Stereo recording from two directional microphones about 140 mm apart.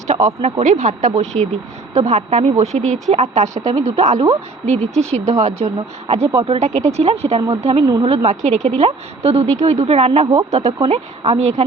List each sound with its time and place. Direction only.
0.6 s a woman's voice: 60° right (ahead or behind); by 6.7 s 45° right (ahead or behind)
6.7 s a woman's voice: 55° right (ahead or behind)